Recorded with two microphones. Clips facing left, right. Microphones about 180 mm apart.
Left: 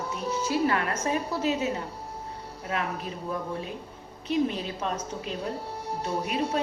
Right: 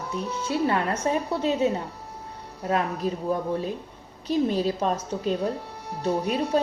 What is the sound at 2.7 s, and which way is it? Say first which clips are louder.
Speech: right 6 dB; 40° right (ahead or behind).